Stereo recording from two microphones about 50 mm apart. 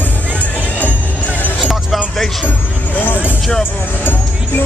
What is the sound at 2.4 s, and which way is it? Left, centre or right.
Vehicle, left.